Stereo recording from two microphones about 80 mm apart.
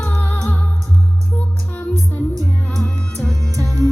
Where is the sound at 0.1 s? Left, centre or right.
Left.